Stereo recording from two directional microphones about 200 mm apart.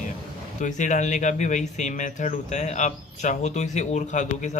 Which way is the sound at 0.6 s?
40° left (ahead or behind).